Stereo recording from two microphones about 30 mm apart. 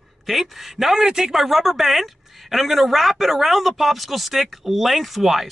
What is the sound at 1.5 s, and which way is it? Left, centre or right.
A man's voice, centre.